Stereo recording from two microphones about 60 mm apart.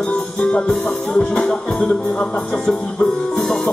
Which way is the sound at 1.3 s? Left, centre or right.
Centre.